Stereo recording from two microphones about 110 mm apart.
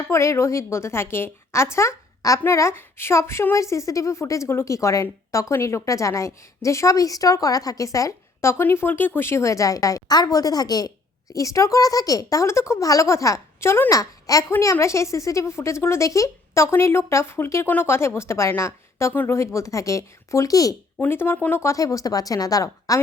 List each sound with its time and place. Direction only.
0.1 s a woman's voice: 25° left (ahead or behind)
21.0 s a woman's voice: 20° left (ahead or behind)
21.6 s a woman's voice: 30° left (ahead or behind)